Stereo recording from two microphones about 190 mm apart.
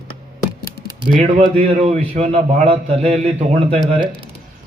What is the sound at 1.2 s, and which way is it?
A man's voice, 40° right (ahead or behind).